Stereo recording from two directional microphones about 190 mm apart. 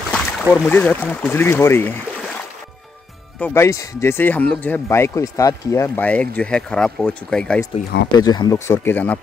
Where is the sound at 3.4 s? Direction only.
15° left (ahead or behind).